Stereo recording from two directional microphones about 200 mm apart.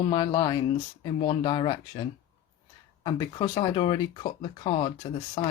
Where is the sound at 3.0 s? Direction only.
20° left (ahead or behind).